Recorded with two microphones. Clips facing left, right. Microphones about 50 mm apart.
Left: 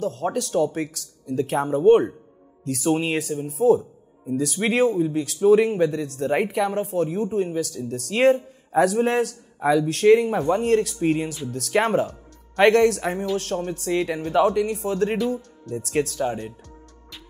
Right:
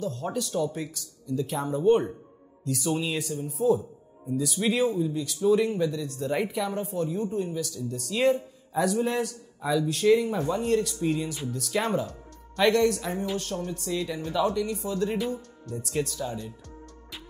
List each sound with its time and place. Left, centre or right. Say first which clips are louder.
0.0 s a man's voice: left 5 dB; left
15.1 s speech: left 5 dB; centre
15.8 s a man's voice: left 7 dB; left